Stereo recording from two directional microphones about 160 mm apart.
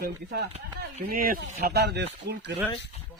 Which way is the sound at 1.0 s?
65° right (ahead or behind).